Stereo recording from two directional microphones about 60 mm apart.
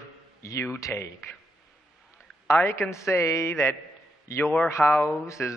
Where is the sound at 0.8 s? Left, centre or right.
Left.